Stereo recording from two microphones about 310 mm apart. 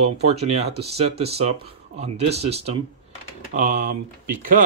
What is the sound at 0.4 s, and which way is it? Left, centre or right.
A man's voice, centre.